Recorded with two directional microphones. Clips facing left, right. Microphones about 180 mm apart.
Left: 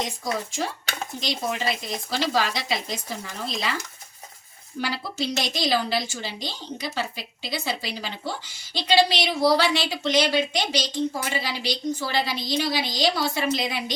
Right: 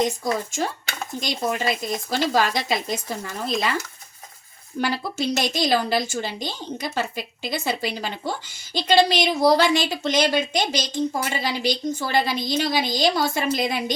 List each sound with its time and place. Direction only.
0.0 s a woman's voice: 50° right (ahead or behind)
4.8 s a woman's voice: 50° right (ahead or behind)